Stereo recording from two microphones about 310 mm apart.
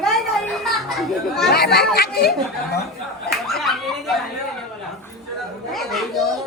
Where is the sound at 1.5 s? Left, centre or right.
Left.